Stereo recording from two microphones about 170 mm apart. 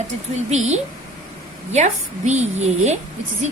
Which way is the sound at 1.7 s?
40° right (ahead or behind).